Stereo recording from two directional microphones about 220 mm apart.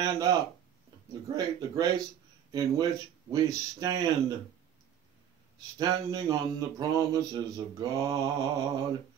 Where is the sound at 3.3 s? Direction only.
15° right (ahead or behind).